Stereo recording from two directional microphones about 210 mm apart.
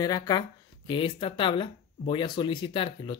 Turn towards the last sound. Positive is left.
turn(degrees=25)  # may be behind; listen again after turning